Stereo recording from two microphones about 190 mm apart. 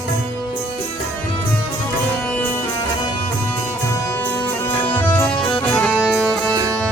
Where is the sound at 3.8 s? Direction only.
15° left (ahead or behind).